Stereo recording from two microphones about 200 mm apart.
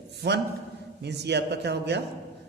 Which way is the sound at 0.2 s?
55° right (ahead or behind).